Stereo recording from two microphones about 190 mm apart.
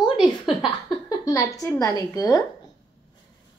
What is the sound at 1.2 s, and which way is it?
A woman's voice, 15° left (ahead or behind).